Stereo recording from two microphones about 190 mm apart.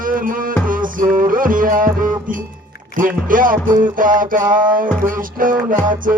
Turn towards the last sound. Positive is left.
turn(degrees=-45)  # may be behind; listen again after turning